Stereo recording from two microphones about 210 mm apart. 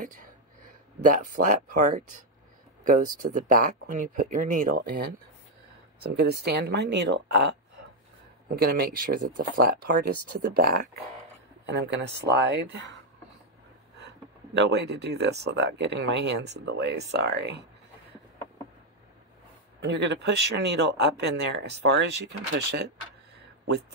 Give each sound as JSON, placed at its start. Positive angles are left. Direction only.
{"t": 0.0, "sound": "speech", "side_deg": -40}
{"t": 1.4, "sound": "speech", "side_deg": -35}
{"t": 6.1, "sound": "speech", "side_deg": -50}
{"t": 8.5, "sound": "speech", "side_deg": -45}
{"t": 11.6, "sound": "speech", "side_deg": -55}
{"t": 14.5, "sound": "speech", "side_deg": -55}
{"t": 19.8, "sound": "speech", "side_deg": -60}